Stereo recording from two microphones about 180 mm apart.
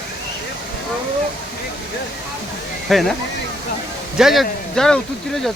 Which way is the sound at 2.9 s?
Centre (ahead or behind).